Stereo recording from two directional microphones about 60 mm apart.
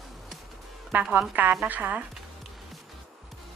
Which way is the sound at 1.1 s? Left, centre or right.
Right.